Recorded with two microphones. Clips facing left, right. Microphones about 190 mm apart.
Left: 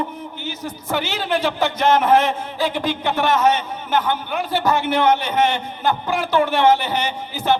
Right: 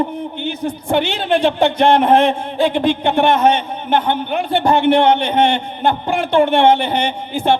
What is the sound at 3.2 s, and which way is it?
Speech, 60° right (ahead or behind).